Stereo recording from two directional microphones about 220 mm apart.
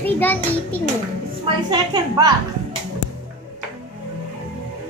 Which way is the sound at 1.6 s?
20° right (ahead or behind).